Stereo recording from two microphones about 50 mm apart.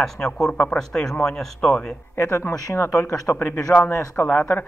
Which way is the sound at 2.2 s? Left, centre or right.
Left.